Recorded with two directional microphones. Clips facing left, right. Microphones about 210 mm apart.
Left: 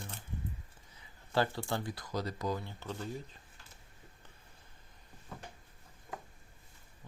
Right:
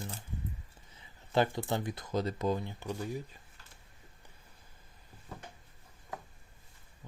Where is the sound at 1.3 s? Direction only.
20° right (ahead or behind).